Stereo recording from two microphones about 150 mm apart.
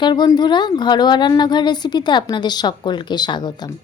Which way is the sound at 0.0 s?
30° left (ahead or behind).